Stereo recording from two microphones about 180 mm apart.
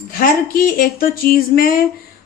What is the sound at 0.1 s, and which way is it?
Speech, 55° left (ahead or behind).